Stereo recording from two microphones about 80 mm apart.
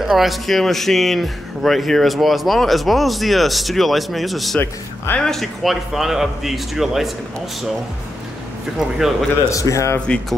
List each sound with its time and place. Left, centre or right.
0.0 s a man's voice: centre
4.6 s speech: left
5.2 s a man's voice: centre
8.7 s a man's voice: centre
9.5 s speech: left
9.9 s speech: centre